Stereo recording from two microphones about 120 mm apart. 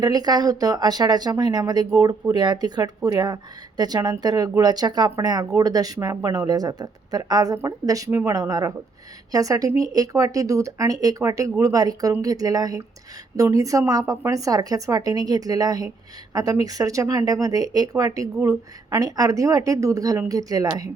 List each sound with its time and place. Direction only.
0.0 s speech: 35° right (ahead or behind)